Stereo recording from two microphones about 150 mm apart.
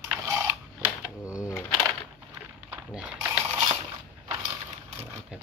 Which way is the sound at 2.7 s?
5° right (ahead or behind).